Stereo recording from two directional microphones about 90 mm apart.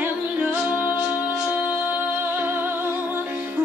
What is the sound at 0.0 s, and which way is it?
Music, 15° right (ahead or behind).